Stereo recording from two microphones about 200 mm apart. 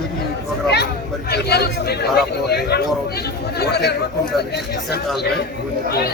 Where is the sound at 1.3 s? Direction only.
55° left (ahead or behind).